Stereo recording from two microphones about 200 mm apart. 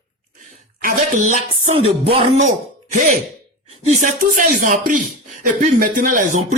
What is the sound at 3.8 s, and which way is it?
Speech, 40° right (ahead or behind).